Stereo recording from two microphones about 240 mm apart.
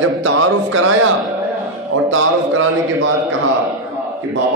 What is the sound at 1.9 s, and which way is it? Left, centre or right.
Speech, right.